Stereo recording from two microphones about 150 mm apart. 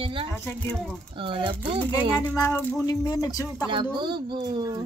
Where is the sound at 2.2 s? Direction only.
15° left (ahead or behind).